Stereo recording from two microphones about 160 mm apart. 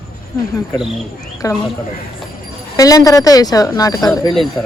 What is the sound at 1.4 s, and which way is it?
Speech, 20° left (ahead or behind).